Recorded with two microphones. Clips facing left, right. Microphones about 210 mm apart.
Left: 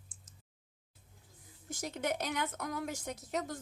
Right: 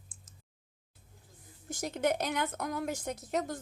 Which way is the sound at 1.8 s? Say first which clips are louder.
Right 5 dB; 50° right (ahead or behind).